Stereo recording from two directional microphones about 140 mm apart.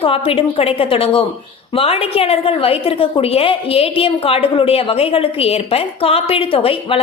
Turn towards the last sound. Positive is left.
turn(degrees=40)  # may be behind; listen again after turning